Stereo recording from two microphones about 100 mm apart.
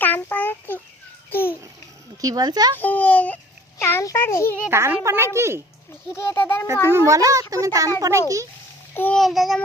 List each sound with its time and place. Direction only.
0.0 s child singing: 20° left (ahead or behind)
1.3 s a child's voice: 20° left (ahead or behind)
2.2 s a child's voice: 40° right (ahead or behind)
2.7 s speech: 15° left (ahead or behind)
3.8 s a child's voice: 25° left (ahead or behind)
4.7 s speech: 25° right (ahead or behind)
6.1 s a child's voice: 25° left (ahead or behind)
6.8 s a child's voice: 25° right (ahead or behind)
9.1 s a child's voice: centre (ahead or behind)